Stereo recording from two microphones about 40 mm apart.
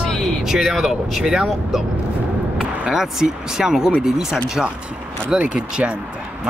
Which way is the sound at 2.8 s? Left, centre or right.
Centre.